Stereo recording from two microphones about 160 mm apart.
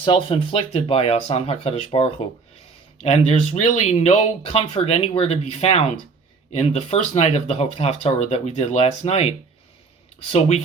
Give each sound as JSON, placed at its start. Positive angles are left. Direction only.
{"t": 0.0, "sound": "speech", "side_deg": 35}